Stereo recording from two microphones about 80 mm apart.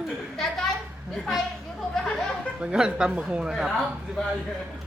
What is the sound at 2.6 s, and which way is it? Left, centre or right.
A woman's voice, centre.